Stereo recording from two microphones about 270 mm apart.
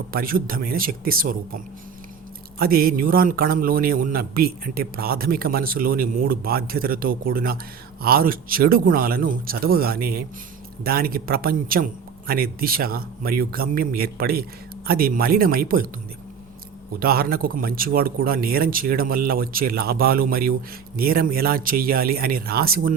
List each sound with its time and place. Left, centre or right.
0.1 s speech: right
17.0 s speech: right